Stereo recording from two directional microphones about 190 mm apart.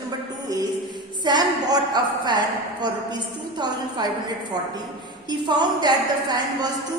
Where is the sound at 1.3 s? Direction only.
20° right (ahead or behind).